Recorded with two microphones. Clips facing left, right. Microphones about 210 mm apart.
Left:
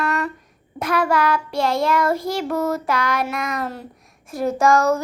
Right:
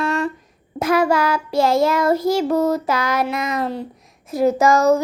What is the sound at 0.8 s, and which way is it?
Child singing, 25° right (ahead or behind).